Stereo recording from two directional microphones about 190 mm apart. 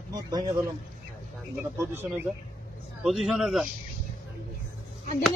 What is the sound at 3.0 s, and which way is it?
Speech, centre (ahead or behind).